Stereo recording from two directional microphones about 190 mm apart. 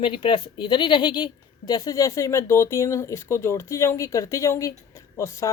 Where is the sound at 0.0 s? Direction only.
25° left (ahead or behind).